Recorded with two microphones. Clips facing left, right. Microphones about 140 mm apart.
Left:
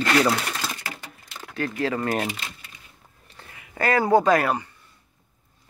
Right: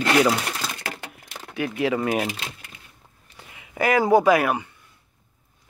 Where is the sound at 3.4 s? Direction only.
20° right (ahead or behind).